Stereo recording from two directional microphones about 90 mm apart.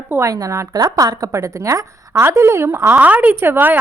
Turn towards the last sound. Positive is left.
turn(degrees=-20)  # may be behind; listen again after turning